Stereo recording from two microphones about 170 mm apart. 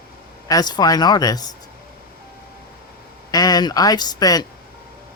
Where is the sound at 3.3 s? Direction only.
20° left (ahead or behind).